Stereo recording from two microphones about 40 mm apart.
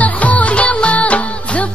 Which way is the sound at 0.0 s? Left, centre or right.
Left.